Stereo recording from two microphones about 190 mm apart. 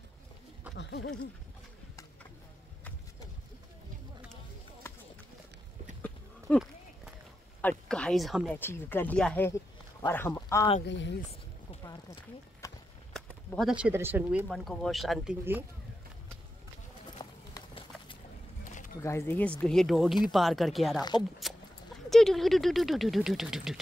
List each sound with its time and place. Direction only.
0.7 s a sound: 65° left (ahead or behind)
6.0 s a sound: 5° left (ahead or behind)
7.9 s speech: 5° left (ahead or behind)
8.5 s speech: 10° left (ahead or behind)
10.9 s speech: 65° left (ahead or behind)
12.6 s run: 15° left (ahead or behind)
13.1 s speech: centre (ahead or behind)
17.2 s run: 25° left (ahead or behind)
18.9 s speech: 15° left (ahead or behind)
20.9 s speech: 20° left (ahead or behind)
21.4 s a sound: centre (ahead or behind)
22.1 s speech: centre (ahead or behind)